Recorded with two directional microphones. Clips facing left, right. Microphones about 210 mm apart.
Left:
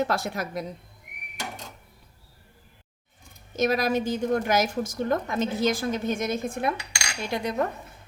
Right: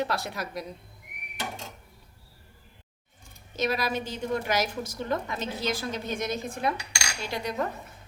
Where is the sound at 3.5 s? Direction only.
45° left (ahead or behind).